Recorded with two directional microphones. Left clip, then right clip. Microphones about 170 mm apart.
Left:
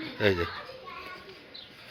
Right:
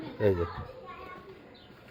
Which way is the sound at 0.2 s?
10° right (ahead or behind).